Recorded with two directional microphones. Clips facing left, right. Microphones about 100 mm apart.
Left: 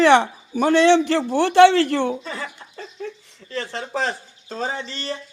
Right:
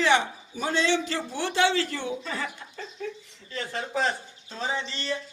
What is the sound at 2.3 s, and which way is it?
Speech, 35° left (ahead or behind).